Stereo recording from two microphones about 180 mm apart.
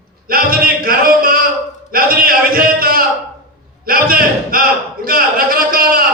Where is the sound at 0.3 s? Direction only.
55° right (ahead or behind).